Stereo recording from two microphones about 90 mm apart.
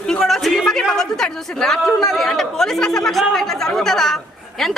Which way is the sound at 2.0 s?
Centre (ahead or behind).